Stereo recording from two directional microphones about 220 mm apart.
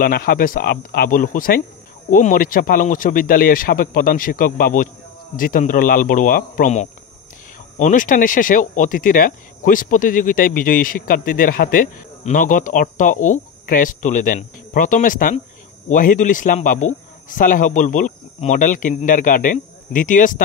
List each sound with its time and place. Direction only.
0.0 s speech: 45° left (ahead or behind)